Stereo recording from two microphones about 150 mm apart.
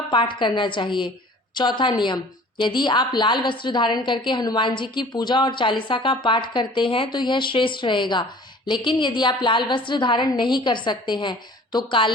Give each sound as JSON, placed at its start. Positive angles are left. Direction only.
{"t": 0.1, "sound": "a woman's voice", "side_deg": 30}